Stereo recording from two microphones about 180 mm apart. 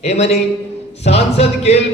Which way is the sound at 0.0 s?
35° left (ahead or behind).